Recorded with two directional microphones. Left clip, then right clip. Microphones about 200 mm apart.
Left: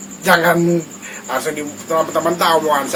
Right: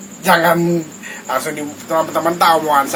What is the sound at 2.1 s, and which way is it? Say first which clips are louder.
Speech: right 3 dB; 10° right (ahead or behind).